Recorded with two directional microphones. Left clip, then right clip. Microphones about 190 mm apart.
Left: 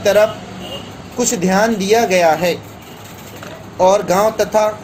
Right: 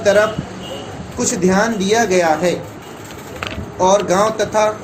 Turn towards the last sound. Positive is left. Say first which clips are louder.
# left 1 dB
turn(degrees=45)  # may be behind; listen again after turning